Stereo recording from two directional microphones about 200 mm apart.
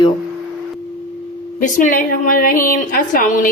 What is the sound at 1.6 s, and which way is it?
A woman's voice, 40° left (ahead or behind).